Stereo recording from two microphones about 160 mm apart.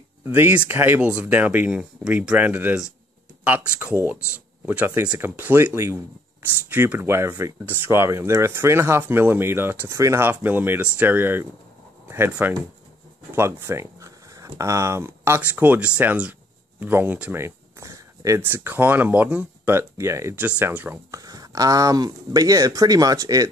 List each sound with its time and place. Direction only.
0.2 s speech: 15° right (ahead or behind)